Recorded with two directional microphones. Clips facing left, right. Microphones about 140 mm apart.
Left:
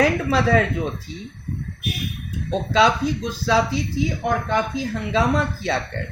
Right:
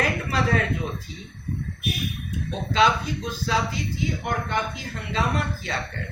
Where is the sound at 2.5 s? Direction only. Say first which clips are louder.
Left 3 dB; 90° left.